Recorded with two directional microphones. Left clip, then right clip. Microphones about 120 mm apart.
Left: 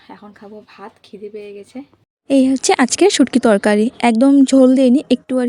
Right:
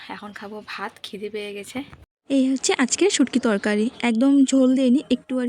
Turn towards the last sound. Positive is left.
turn(degrees=35)  # may be behind; listen again after turning